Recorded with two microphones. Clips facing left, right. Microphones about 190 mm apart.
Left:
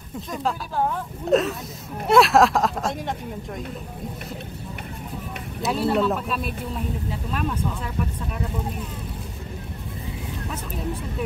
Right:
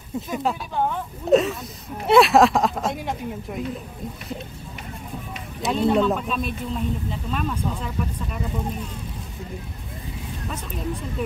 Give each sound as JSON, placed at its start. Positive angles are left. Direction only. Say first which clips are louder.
{"t": 0.3, "sound": "speech", "louder": "even", "side_deg": -5}
{"t": 5.6, "sound": "speech", "louder": "right 2 dB", "side_deg": 5}